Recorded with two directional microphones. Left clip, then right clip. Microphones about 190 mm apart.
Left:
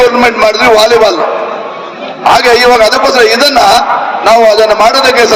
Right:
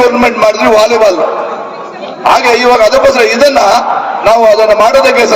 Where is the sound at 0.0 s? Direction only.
40° right (ahead or behind).